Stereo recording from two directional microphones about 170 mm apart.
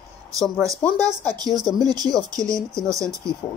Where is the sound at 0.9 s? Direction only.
25° right (ahead or behind).